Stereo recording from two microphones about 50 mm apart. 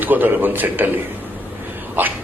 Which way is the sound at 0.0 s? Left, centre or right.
Right.